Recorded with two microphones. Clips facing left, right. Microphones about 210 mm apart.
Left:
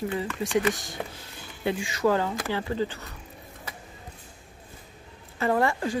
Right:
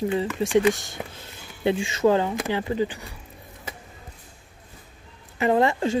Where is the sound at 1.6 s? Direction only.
25° right (ahead or behind).